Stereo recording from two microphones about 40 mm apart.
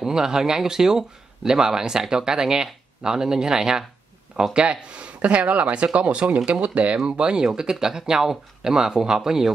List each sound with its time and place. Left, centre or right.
0.0 s speech: centre
4.6 s speech: right
7.1 s speech: right